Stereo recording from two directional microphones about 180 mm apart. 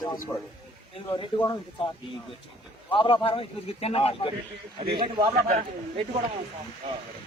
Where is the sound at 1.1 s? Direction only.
20° left (ahead or behind).